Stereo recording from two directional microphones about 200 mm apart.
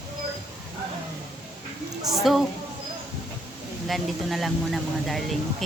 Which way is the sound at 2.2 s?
Centre (ahead or behind).